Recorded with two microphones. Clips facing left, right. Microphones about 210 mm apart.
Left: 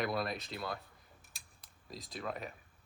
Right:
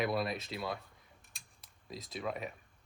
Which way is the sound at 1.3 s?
Centre (ahead or behind).